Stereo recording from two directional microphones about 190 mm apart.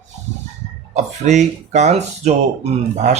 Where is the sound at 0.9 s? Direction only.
40° right (ahead or behind).